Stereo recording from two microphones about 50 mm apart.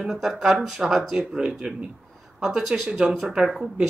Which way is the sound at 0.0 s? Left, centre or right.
Centre.